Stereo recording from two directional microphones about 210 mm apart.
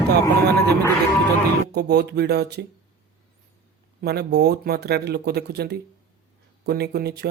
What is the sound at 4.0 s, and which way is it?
Speech, 50° right (ahead or behind).